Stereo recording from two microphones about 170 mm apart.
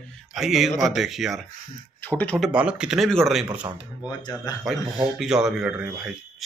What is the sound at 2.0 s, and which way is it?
Speech, 10° left (ahead or behind).